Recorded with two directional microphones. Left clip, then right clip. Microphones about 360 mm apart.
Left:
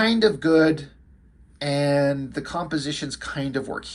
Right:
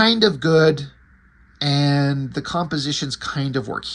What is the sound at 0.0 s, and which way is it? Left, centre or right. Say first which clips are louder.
Speech: right 3 dB; centre.